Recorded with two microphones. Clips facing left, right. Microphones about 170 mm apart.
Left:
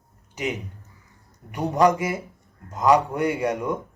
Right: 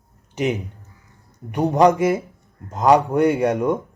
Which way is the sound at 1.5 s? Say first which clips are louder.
Right 4 dB; 25° right (ahead or behind).